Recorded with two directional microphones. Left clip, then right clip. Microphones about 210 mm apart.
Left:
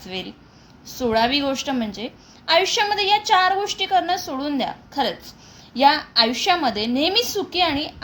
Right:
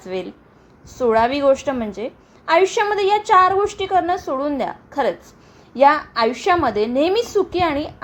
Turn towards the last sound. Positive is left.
turn(degrees=-20)  # may be behind; listen again after turning